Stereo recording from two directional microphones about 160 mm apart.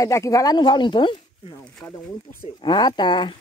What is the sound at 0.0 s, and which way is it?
Speech, 20° left (ahead or behind).